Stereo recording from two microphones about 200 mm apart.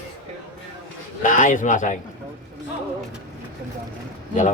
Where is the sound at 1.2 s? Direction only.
40° left (ahead or behind).